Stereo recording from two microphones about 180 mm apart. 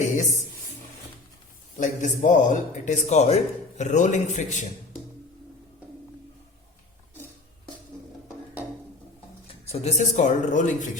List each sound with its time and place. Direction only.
1.8 s a man's voice: 45° left (ahead or behind)
9.6 s a man's voice: 35° left (ahead or behind)